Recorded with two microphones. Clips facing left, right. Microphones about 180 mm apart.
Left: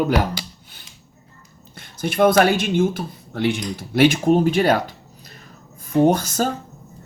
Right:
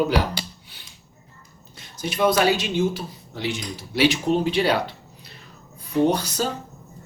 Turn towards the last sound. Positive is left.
turn(degrees=50)  # may be behind; listen again after turning